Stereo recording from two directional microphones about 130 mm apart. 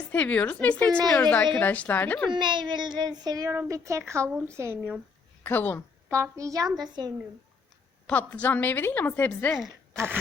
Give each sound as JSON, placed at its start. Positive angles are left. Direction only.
{"t": 0.1, "sound": "a woman's voice", "side_deg": 10}
{"t": 2.3, "sound": "a child's voice", "side_deg": -35}
{"t": 3.5, "sound": "a woman's voice", "side_deg": -20}
{"t": 5.4, "sound": "a woman's voice", "side_deg": 15}
{"t": 6.1, "sound": "a woman's voice", "side_deg": -20}
{"t": 8.0, "sound": "a woman's voice", "side_deg": 10}
{"t": 9.9, "sound": "speech", "side_deg": -20}